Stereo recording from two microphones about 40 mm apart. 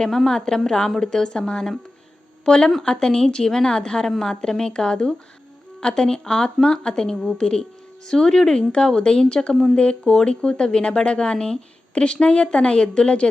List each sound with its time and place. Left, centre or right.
0.1 s a woman's voice: centre; by 13.3 s left